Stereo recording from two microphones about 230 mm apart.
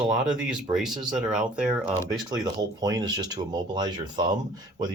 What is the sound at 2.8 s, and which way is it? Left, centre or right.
Speech, centre.